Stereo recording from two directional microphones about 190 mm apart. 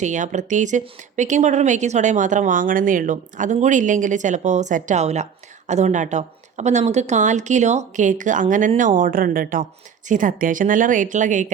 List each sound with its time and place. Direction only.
0.0 s a woman's voice: 40° right (ahead or behind)